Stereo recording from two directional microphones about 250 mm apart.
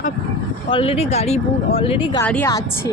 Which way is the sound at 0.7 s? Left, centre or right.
Left.